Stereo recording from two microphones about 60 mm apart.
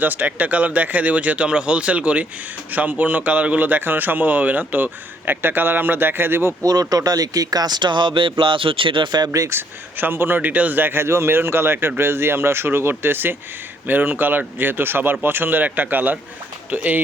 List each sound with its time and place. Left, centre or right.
0.0 s a man's voice: right
6.6 s speech: right
9.2 s speech: right
9.5 s a man's voice: right
11.0 s a man's voice: right